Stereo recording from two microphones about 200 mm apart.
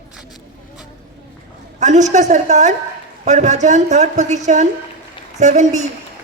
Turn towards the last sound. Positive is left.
turn(degrees=-35)  # may be behind; listen again after turning